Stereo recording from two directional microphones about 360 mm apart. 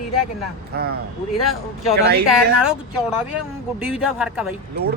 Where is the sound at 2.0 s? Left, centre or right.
Right.